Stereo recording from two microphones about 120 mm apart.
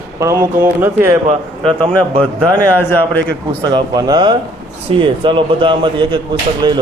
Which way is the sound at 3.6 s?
40° right (ahead or behind).